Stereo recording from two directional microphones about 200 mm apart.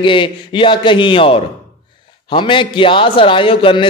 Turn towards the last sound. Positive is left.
turn(degrees=25)  # may be behind; listen again after turning